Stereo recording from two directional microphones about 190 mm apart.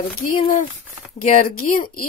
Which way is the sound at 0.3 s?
45° left (ahead or behind).